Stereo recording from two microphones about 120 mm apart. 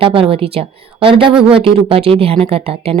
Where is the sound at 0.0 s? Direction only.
50° right (ahead or behind).